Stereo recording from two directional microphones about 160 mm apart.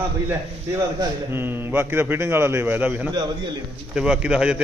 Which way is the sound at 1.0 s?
15° right (ahead or behind).